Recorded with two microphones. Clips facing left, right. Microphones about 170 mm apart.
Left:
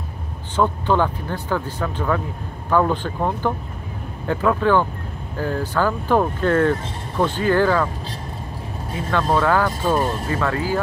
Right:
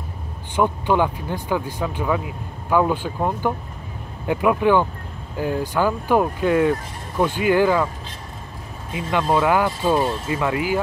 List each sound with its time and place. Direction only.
0.6 s speech: 15° right (ahead or behind)
8.9 s speech: 15° right (ahead or behind)